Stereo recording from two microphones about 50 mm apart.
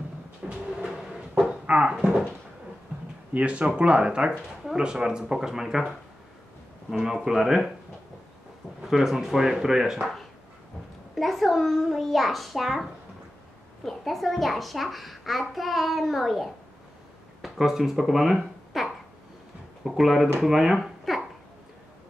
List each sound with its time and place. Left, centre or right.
0.4 s train: centre
1.7 s dog: right
3.3 s speech: right; by 5.9 s centre
7.0 s speech: centre
8.8 s speech: centre
11.1 s a child's voice: centre
13.8 s a child's voice: centre